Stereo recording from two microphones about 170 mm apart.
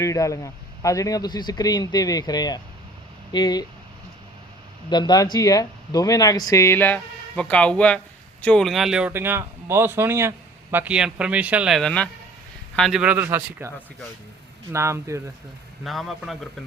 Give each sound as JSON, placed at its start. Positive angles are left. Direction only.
{"t": 0.0, "sound": "speech", "side_deg": 20}
{"t": 4.9, "sound": "a man's voice", "side_deg": 25}
{"t": 15.8, "sound": "speech", "side_deg": 0}